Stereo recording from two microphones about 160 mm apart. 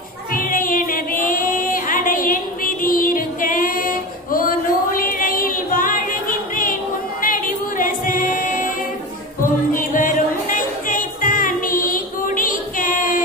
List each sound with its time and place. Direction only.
0.3 s female singing: 60° left (ahead or behind)
7.2 s music: 60° left (ahead or behind)